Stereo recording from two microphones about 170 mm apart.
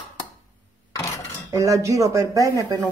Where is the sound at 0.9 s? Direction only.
20° left (ahead or behind).